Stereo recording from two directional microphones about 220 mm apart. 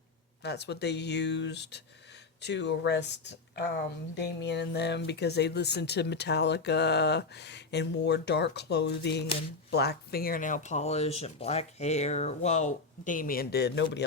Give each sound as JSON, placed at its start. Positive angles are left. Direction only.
{"t": 0.4, "sound": "speech", "side_deg": 50}